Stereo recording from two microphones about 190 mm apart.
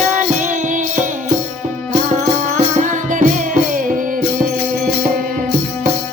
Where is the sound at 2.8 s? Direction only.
45° right (ahead or behind).